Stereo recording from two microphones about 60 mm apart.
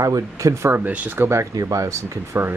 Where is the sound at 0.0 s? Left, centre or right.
Right.